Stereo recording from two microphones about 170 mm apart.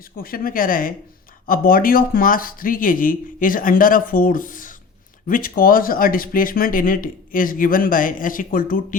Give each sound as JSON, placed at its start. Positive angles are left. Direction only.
{"t": 0.2, "sound": "speech", "side_deg": 60}